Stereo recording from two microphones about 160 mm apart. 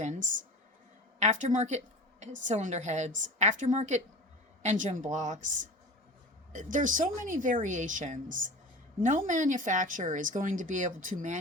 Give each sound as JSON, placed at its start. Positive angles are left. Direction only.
{"t": 0.0, "sound": "speech", "side_deg": -50}